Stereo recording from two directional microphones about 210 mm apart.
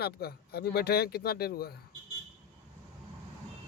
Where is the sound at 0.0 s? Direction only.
50° left (ahead or behind).